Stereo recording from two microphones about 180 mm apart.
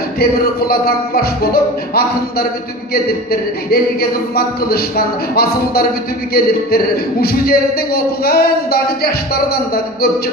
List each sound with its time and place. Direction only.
0.2 s a man's voice: 55° left (ahead or behind)